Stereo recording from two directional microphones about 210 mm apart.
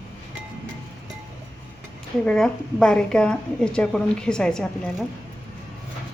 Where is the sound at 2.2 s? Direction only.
5° left (ahead or behind).